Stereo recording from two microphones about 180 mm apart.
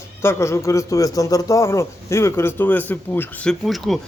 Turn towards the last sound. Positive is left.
turn(degrees=0)  # may be behind; listen again after turning